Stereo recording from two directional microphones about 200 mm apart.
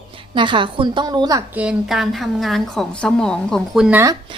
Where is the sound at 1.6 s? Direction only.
5° right (ahead or behind).